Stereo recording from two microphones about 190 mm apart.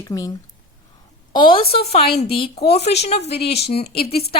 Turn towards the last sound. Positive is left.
turn(degrees=55)  # may be behind; listen again after turning